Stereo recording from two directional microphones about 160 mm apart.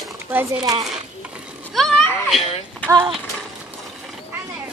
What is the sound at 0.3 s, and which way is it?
Speech, 15° right (ahead or behind).